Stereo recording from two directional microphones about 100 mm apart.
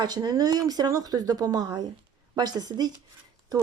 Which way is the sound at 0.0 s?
40° right (ahead or behind).